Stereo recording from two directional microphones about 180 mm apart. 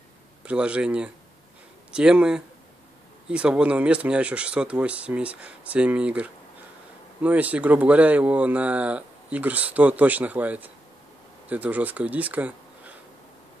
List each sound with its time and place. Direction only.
0.5 s speech: 5° right (ahead or behind)